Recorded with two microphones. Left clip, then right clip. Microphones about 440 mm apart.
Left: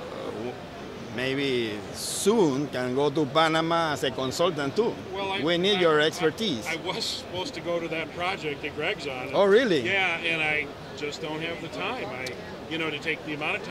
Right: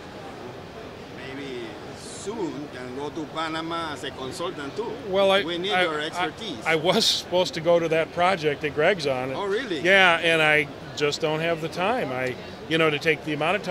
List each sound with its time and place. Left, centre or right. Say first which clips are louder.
1.2 s speech: left 9 dB; left
5.1 s speech: right 10 dB; right
5.5 s speech: left 2 dB; left
6.7 s speech: right 9 dB; right
9.4 s speech: left 7 dB; left
9.8 s speech: right 8 dB; right